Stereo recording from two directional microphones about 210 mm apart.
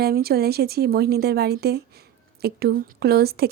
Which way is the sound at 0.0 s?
45° right (ahead or behind).